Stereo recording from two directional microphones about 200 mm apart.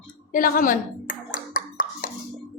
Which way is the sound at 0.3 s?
45° left (ahead or behind).